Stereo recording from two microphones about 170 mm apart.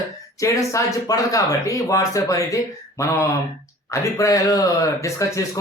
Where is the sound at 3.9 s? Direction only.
20° left (ahead or behind).